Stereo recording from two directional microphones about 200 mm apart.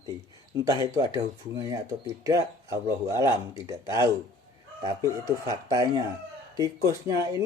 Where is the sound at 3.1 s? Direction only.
15° right (ahead or behind).